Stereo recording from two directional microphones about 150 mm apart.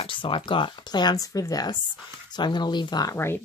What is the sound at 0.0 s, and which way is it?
Speech, 35° left (ahead or behind).